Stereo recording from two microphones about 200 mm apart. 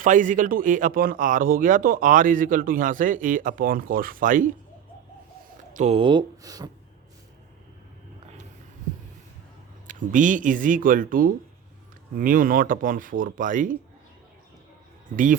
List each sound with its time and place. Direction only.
0.0 s speech: 40° right (ahead or behind)
5.7 s speech: 30° right (ahead or behind)
9.8 s speech: 40° right (ahead or behind)
15.1 s speech: 40° right (ahead or behind)